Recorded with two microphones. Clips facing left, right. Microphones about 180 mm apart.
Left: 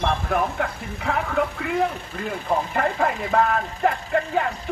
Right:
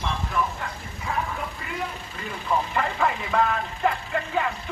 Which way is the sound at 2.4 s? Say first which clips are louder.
Left 2 dB; 50° left (ahead or behind).